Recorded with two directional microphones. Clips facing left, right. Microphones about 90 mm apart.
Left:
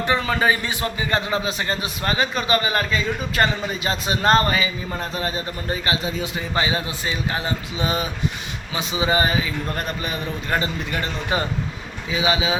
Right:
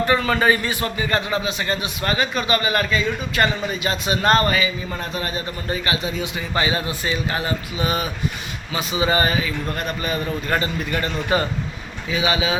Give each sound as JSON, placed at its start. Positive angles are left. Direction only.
{"t": 0.0, "sound": "a man's voice", "side_deg": 15}
{"t": 1.5, "sound": "a man's voice", "side_deg": 35}